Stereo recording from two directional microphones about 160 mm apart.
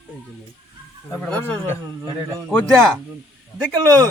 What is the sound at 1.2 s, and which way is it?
Speech, 10° left (ahead or behind).